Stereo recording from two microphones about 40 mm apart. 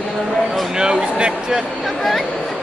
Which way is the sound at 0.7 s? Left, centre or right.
Centre.